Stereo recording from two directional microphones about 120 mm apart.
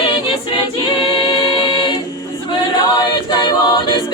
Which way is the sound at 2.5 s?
35° left (ahead or behind).